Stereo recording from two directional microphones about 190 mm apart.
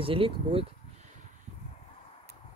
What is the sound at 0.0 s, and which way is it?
Speech, 30° right (ahead or behind).